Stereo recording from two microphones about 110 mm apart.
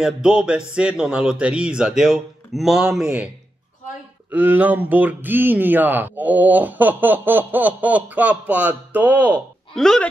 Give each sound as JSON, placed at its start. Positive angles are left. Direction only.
{"t": 0.0, "sound": "speech", "side_deg": -5}
{"t": 4.3, "sound": "speech", "side_deg": -15}
{"t": 9.8, "sound": "speech", "side_deg": 5}